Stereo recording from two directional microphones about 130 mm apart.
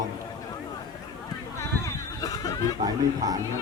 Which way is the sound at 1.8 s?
30° left (ahead or behind).